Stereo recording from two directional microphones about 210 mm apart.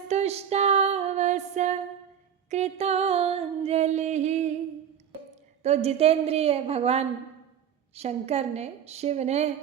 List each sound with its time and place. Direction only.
0.1 s music: 30° right (ahead or behind)
5.3 s a woman's voice: 30° right (ahead or behind)